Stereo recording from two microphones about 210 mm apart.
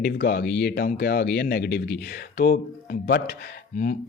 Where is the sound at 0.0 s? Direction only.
50° left (ahead or behind).